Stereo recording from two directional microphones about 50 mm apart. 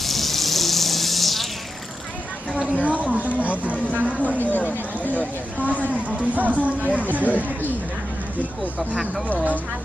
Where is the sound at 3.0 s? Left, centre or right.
Right.